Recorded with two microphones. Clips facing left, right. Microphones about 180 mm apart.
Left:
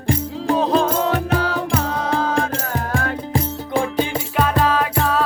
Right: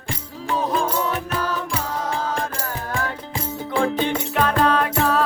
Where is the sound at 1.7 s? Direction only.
60° left (ahead or behind).